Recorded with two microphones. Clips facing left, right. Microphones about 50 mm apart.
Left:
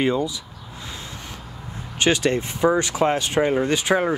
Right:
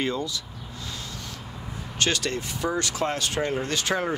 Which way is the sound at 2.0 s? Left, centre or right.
Centre.